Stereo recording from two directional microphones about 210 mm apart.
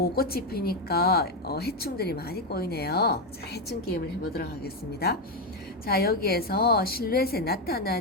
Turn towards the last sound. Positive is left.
turn(degrees=45)  # may be behind; listen again after turning